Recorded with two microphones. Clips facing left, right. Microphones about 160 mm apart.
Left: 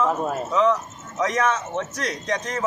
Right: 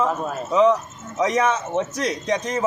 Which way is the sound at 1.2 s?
10° right (ahead or behind).